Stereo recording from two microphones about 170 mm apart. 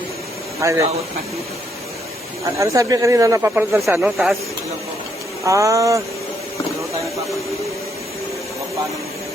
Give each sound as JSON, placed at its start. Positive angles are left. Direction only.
{"t": 0.6, "sound": "speech", "side_deg": -20}
{"t": 2.6, "sound": "speech", "side_deg": -20}
{"t": 3.9, "sound": "speech", "side_deg": -5}
{"t": 5.5, "sound": "speech", "side_deg": -20}